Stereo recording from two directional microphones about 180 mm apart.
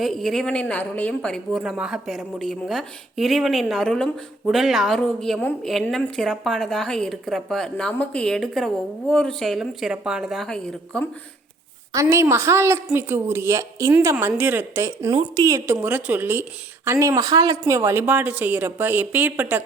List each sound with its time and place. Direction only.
0.0 s a woman's voice: centre (ahead or behind)
11.9 s a woman's voice: 15° right (ahead or behind)
15.1 s a woman's voice: 30° right (ahead or behind)
15.4 s a woman's voice: 15° right (ahead or behind)